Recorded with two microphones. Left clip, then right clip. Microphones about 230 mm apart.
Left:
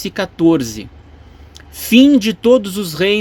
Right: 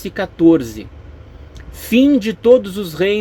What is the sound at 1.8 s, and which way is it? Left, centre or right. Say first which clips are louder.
Speech: left 3 dB; left.